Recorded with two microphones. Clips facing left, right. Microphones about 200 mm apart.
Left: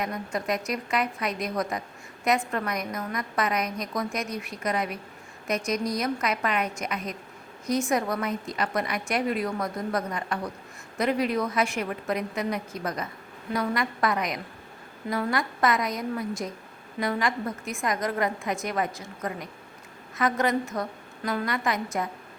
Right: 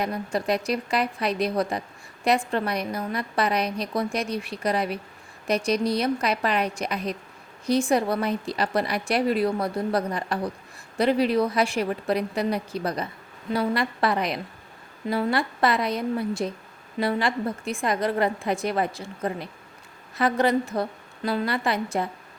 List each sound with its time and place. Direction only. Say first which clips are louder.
0.0 s a woman's voice: right 3 dB; 35° right (ahead or behind)